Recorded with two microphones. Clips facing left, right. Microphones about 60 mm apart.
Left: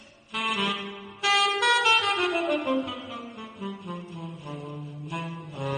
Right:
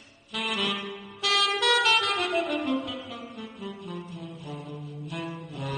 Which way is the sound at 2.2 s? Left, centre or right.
Centre.